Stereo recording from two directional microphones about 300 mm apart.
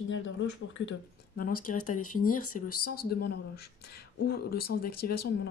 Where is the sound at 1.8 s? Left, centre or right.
Left.